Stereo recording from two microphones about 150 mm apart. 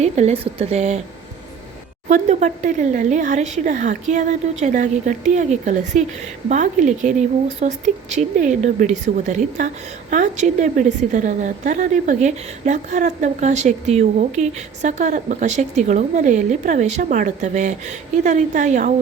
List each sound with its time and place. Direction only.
0.0 s a woman's voice: 45° right (ahead or behind)
2.0 s a woman's voice: 50° right (ahead or behind)